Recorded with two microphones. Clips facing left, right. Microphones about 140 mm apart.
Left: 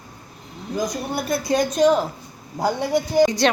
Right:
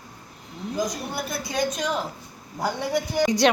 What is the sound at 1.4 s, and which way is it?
Speech, 45° left (ahead or behind).